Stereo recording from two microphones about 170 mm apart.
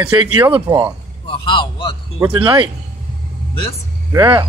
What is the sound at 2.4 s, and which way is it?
Speech, 30° right (ahead or behind).